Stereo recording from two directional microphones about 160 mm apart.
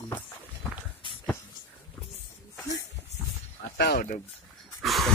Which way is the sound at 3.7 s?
80° left.